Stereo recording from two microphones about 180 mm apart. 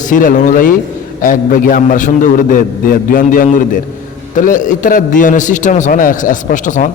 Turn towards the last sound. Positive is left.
turn(degrees=45)  # may be behind; listen again after turning